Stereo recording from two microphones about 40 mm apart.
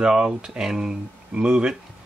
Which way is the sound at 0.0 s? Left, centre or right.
Right.